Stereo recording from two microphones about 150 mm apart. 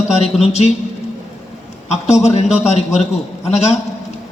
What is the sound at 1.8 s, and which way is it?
A man's voice, 45° left (ahead or behind).